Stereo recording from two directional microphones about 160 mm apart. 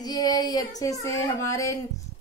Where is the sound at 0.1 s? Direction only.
25° left (ahead or behind).